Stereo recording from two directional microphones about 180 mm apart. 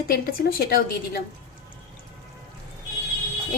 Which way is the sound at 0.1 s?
55° left (ahead or behind).